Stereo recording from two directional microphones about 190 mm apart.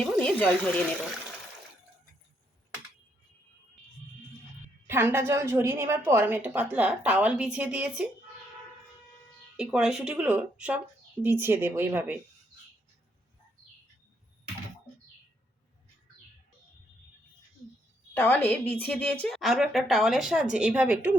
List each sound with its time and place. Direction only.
0.0 s speech: 5° left (ahead or behind)
4.9 s a woman's voice: 10° right (ahead or behind)
9.6 s a woman's voice: 5° right (ahead or behind)
18.1 s a woman's voice: 10° left (ahead or behind); by 21.1 s 5° right (ahead or behind)